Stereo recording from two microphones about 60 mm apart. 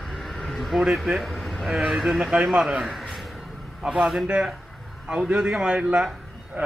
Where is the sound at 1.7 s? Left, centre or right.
Centre.